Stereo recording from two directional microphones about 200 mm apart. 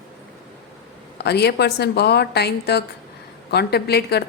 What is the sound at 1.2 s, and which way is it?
A woman's voice, 55° left (ahead or behind).